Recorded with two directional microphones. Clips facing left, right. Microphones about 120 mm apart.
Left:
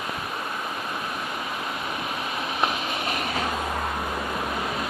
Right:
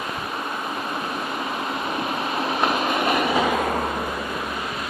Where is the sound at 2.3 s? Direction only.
40° right (ahead or behind); by 3.7 s 75° right (ahead or behind).